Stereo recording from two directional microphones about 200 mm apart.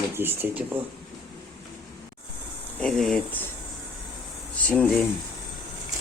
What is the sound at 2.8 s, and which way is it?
Speech, centre (ahead or behind).